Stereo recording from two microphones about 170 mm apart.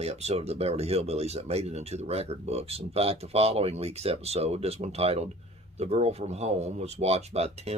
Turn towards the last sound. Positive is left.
turn(degrees=-40)  # may be behind; listen again after turning